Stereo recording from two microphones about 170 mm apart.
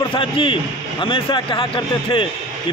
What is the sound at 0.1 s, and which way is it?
Speech, 30° left (ahead or behind).